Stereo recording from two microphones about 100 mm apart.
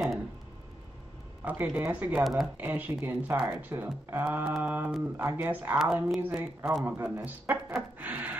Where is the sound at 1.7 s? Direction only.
20° right (ahead or behind).